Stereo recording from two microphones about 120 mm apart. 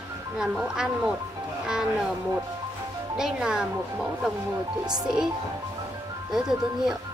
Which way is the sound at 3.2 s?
5° right (ahead or behind).